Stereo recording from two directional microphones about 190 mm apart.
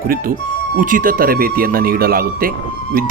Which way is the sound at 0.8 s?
45° right (ahead or behind).